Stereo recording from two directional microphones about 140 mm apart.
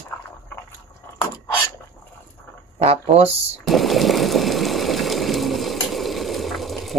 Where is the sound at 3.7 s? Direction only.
Centre (ahead or behind).